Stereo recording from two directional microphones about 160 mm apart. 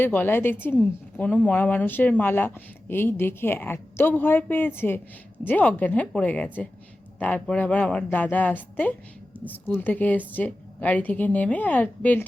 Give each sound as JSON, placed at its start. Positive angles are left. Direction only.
{"t": 0.0, "sound": "a woman's voice", "side_deg": 10}